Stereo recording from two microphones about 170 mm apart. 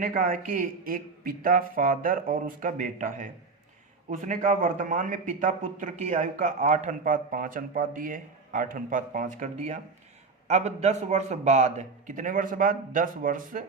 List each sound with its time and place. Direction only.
0.0 s a man's voice: 55° right (ahead or behind)